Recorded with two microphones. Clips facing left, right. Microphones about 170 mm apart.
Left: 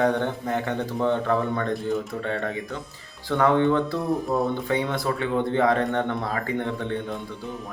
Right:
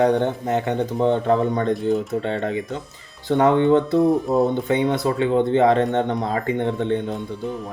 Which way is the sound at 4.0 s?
Centre (ahead or behind).